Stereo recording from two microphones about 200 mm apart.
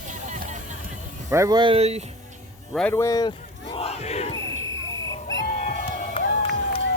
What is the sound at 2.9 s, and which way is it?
Battle cry, 15° left (ahead or behind).